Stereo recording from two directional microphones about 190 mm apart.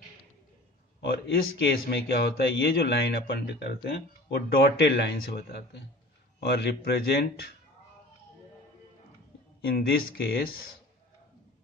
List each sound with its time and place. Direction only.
1.0 s a man's voice: 60° left (ahead or behind)
9.7 s a man's voice: 55° left (ahead or behind)